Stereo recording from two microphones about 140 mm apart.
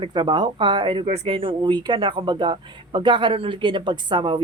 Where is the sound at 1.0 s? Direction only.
50° right (ahead or behind).